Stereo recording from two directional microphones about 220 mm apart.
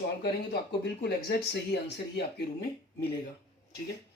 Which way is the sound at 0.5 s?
45° left (ahead or behind).